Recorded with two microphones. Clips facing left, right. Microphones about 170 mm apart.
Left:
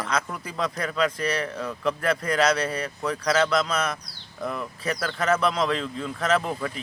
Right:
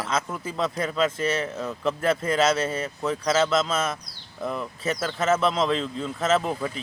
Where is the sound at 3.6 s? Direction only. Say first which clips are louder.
Right 1 dB; centre (ahead or behind).